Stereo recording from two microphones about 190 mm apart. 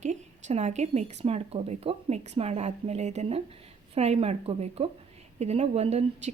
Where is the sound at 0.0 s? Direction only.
40° right (ahead or behind).